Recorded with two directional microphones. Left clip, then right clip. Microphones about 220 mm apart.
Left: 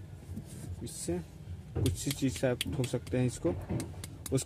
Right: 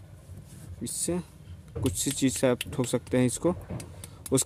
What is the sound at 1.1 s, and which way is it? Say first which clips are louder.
Speech: right 4 dB; 45° right (ahead or behind).